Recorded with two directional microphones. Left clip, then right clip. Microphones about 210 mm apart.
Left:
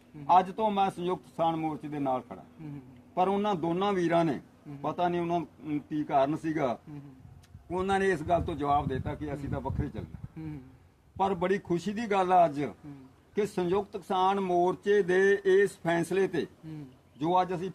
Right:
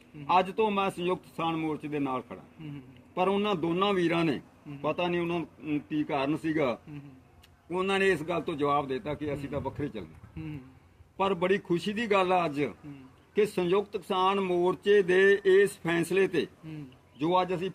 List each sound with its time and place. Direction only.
0.3 s a man's voice: 10° left (ahead or behind)
11.3 s a man's voice: 15° left (ahead or behind)